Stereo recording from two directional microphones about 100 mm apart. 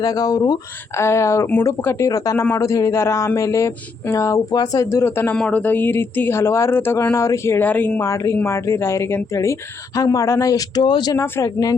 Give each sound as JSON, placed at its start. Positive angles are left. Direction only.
{"t": 0.0, "sound": "speech", "side_deg": 40}
{"t": 0.9, "sound": "speech", "side_deg": 30}
{"t": 5.3, "sound": "speech", "side_deg": 15}
{"t": 11.2, "sound": "speech", "side_deg": 30}